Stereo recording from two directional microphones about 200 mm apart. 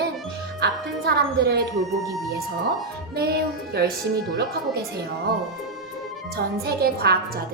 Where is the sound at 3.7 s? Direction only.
55° right (ahead or behind).